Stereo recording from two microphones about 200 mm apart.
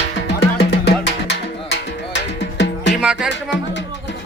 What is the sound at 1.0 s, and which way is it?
Music, 60° left (ahead or behind).